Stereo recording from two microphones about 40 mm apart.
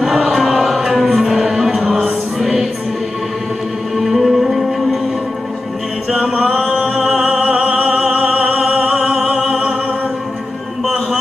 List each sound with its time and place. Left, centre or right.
0.0 s music: centre
3.9 s music: centre
6.1 s a capella: right
6.7 s music: centre
7.2 s opera: right; by 9.6 s centre